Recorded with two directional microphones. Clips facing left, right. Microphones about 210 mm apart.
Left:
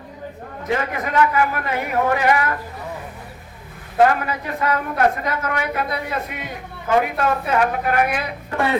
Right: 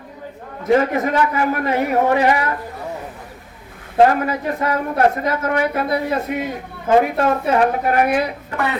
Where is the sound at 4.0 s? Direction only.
35° right (ahead or behind).